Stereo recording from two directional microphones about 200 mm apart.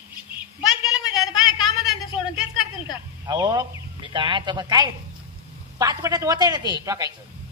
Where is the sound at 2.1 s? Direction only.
25° left (ahead or behind).